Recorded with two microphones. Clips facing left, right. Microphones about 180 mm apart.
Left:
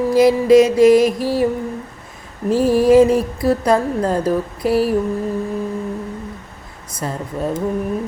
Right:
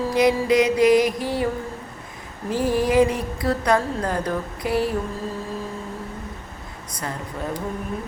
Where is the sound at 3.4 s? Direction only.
25° left (ahead or behind).